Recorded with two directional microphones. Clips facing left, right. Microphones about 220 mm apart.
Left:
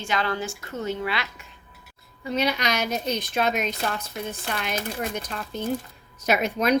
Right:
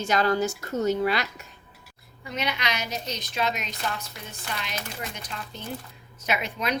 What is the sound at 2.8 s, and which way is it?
A woman's voice, 55° left (ahead or behind).